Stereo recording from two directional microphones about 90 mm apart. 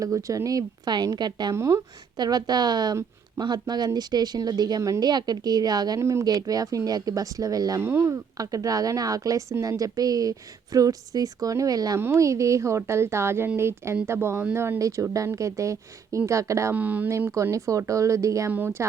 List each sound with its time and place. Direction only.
0.0 s a woman's voice: 40° right (ahead or behind)
1.5 s speech: 30° right (ahead or behind)
2.1 s a woman's voice: 50° right (ahead or behind)
6.0 s speech: 30° right (ahead or behind)
6.2 s a woman's voice: 45° right (ahead or behind)
7.8 s speech: 30° right (ahead or behind)
11.9 s speech: 30° right (ahead or behind)
16.7 s speech: 20° right (ahead or behind)
17.3 s speech: 35° right (ahead or behind)